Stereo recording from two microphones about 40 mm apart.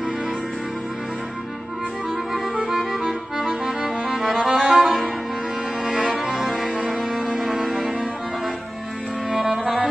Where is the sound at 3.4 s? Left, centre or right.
Centre.